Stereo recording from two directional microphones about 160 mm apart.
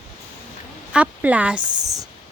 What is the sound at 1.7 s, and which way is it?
Speech, 20° right (ahead or behind).